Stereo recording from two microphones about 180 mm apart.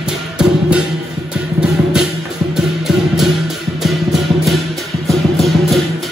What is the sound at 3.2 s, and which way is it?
Music, centre (ahead or behind).